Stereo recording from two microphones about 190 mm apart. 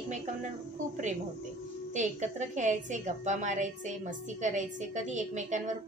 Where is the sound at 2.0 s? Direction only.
40° right (ahead or behind).